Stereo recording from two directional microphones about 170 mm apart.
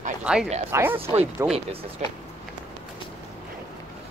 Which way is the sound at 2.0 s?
45° right (ahead or behind).